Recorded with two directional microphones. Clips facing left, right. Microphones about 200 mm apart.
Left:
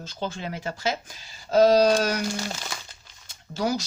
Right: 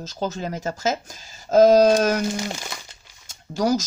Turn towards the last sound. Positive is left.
turn(degrees=-45)  # may be behind; listen again after turning